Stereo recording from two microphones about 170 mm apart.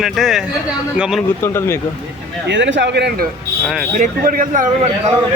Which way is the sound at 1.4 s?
15° left (ahead or behind).